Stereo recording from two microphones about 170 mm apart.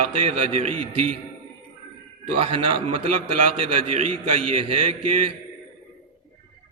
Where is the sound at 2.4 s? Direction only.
30° right (ahead or behind).